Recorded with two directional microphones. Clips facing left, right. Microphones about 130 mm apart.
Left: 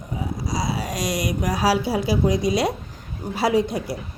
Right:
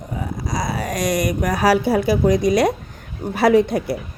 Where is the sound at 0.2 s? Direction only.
50° right (ahead or behind).